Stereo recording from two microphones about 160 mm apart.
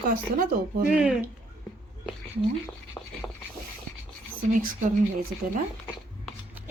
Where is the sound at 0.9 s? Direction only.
5° right (ahead or behind).